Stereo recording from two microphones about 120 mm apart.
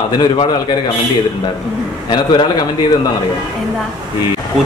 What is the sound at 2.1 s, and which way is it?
Speech, 35° left (ahead or behind).